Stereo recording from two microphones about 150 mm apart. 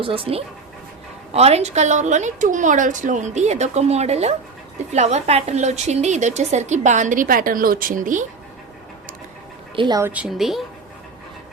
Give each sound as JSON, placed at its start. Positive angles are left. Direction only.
{"t": 0.0, "sound": "a woman's voice", "side_deg": -35}
{"t": 9.7, "sound": "speech", "side_deg": -30}
{"t": 10.0, "sound": "a woman's voice", "side_deg": -10}